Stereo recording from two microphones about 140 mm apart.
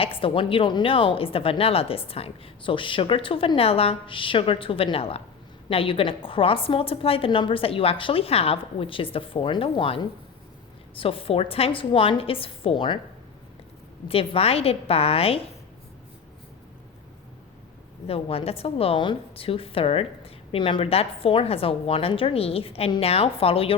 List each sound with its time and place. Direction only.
0.0 s a woman's voice: 40° left (ahead or behind)
14.1 s a woman's voice: 45° left (ahead or behind)
18.1 s a woman's voice: 45° left (ahead or behind)